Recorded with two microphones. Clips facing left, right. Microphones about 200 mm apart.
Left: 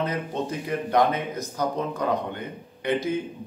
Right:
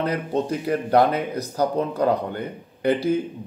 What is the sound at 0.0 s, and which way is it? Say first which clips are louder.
Speech: right 4 dB; 35° right (ahead or behind).